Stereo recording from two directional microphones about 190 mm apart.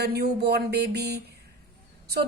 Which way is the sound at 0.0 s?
60° right (ahead or behind).